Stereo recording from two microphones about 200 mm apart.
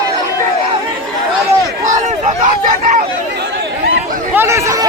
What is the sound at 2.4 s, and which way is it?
Hubbub, 40° right (ahead or behind).